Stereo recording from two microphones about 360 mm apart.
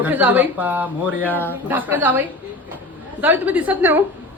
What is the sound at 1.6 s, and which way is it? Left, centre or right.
A woman's voice, centre.